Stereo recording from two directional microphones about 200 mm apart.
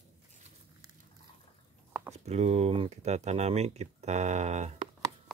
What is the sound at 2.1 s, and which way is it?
Speech, 35° right (ahead or behind).